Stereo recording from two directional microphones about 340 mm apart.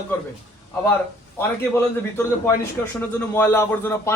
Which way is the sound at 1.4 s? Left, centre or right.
Centre.